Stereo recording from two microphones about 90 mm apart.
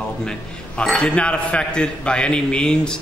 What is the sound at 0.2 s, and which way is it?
A man's voice, 10° left (ahead or behind).